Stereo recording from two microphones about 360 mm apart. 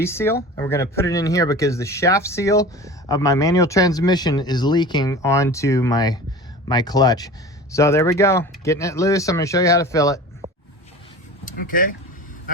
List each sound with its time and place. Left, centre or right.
0.0 s speech: centre
10.4 s a sound: centre
11.4 s speech: left